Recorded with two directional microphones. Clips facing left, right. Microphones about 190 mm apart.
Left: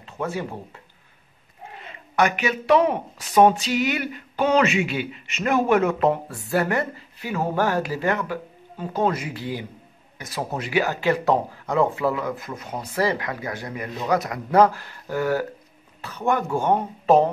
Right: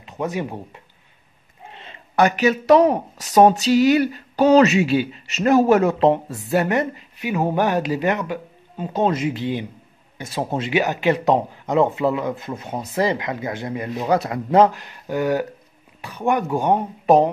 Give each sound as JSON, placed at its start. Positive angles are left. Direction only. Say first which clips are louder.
{"t": 0.0, "sound": "speech", "louder": "right 3 dB", "side_deg": -15}
{"t": 1.7, "sound": "speech", "louder": "even", "side_deg": -30}